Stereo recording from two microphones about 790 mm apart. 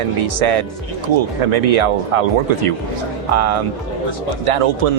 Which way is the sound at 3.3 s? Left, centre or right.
Right.